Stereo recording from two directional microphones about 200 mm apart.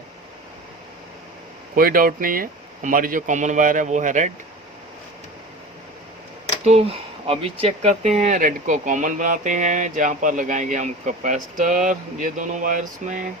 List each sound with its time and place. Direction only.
1.7 s speech: 45° right (ahead or behind)
6.7 s speech: 30° right (ahead or behind)